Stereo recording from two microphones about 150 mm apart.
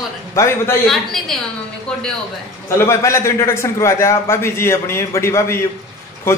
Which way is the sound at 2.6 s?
20° left (ahead or behind).